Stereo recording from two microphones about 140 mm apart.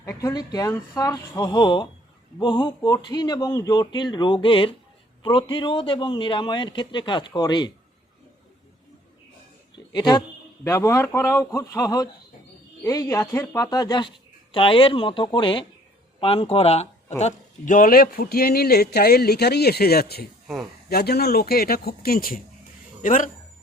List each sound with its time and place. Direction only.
0.2 s a man's voice: 25° left (ahead or behind)
9.7 s a sound: 30° left (ahead or behind)
10.6 s a man's voice: 20° left (ahead or behind); by 22.4 s 90° left
23.0 s speech: 65° left (ahead or behind)